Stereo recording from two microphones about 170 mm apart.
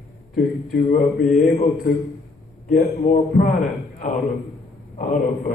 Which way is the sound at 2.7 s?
55° left (ahead or behind).